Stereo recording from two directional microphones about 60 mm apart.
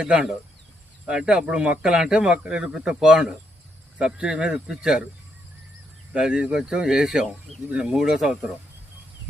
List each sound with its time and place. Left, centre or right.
0.0 s a man's voice: centre
6.1 s a man's voice: centre